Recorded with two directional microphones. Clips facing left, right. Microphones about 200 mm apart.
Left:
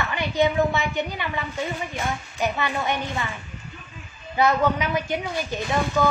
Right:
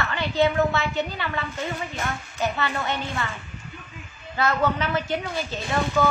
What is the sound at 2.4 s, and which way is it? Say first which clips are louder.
Speech: left 1 dB; 15° left (ahead or behind).